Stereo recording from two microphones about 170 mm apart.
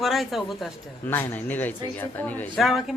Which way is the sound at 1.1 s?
10° left (ahead or behind).